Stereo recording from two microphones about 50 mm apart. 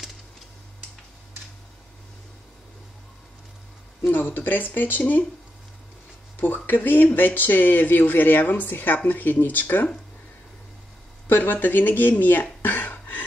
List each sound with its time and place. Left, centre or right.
4.1 s speech: left
6.4 s speech: left
11.2 s speech: left